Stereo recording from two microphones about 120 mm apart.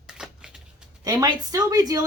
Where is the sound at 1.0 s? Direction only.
30° right (ahead or behind).